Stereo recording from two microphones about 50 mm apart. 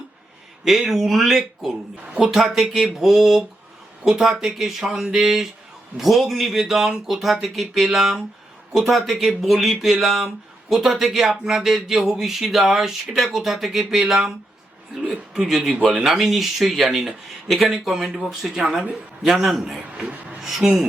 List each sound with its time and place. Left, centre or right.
0.6 s speech: centre
2.1 s speech: centre
8.9 s speech: centre
15.4 s speech: centre
15.9 s speech: centre
16.1 s speech: centre